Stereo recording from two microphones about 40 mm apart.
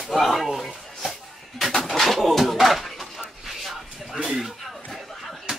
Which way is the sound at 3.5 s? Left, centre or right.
Centre.